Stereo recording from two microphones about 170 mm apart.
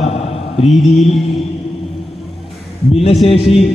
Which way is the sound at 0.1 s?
35° left (ahead or behind).